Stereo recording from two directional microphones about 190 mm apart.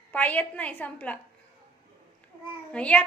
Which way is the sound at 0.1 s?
10° left (ahead or behind).